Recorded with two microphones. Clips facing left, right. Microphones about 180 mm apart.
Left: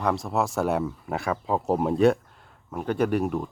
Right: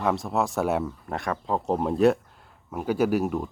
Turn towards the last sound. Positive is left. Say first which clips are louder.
# right 1 dB
turn(degrees=0)  # may be behind; listen again after turning